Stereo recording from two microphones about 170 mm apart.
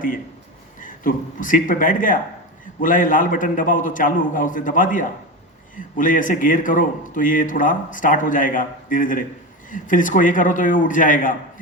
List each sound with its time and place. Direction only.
0.8 s a man's voice: 50° left (ahead or behind)